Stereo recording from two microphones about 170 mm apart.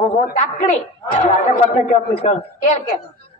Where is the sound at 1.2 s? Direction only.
45° left (ahead or behind).